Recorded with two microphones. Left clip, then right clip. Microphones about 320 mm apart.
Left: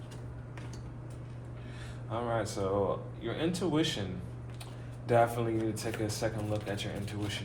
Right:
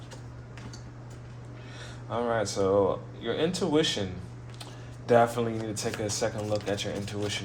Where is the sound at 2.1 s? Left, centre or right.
Right.